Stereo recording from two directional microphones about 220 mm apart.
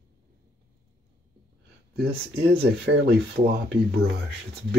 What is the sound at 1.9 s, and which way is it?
Speech, 45° right (ahead or behind).